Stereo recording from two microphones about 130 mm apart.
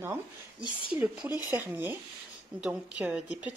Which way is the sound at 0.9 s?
10° right (ahead or behind).